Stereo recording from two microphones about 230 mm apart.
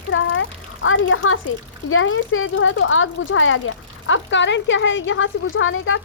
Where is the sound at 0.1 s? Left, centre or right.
Left.